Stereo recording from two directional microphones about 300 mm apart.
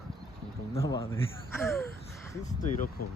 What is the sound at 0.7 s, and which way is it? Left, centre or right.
Speech, centre.